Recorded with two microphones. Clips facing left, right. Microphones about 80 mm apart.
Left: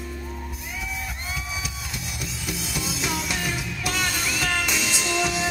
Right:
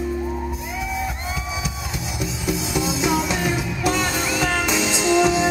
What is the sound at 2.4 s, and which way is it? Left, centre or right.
Music, centre.